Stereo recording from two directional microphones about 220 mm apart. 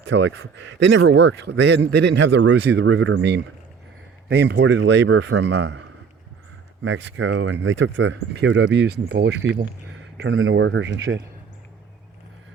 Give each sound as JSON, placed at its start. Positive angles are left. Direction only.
{"t": 0.1, "sound": "speech", "side_deg": -55}
{"t": 6.8, "sound": "speech", "side_deg": -60}